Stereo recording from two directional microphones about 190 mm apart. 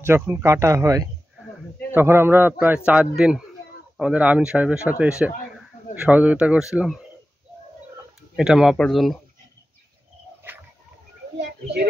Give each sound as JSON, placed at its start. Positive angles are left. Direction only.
{"t": 0.0, "sound": "speech", "side_deg": -10}
{"t": 8.4, "sound": "speech", "side_deg": -5}
{"t": 11.3, "sound": "a sound", "side_deg": -60}